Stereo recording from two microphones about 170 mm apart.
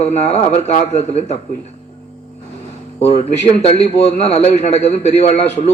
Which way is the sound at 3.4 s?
35° left (ahead or behind).